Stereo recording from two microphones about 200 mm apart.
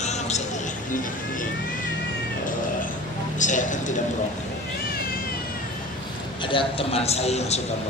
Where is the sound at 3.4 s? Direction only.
40° left (ahead or behind).